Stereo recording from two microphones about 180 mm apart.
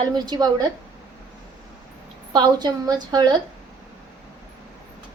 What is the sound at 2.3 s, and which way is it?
A woman's voice, 25° right (ahead or behind).